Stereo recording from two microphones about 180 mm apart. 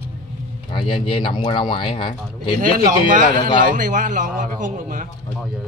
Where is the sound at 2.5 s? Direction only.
50° right (ahead or behind).